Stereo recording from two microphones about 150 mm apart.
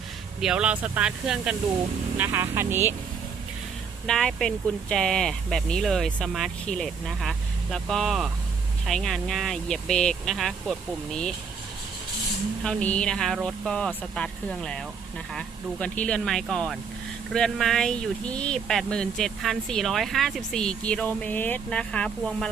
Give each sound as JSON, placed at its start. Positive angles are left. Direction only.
{"t": 0.3, "sound": "speech", "side_deg": -5}
{"t": 4.0, "sound": "speech", "side_deg": 5}
{"t": 12.6, "sound": "speech", "side_deg": 10}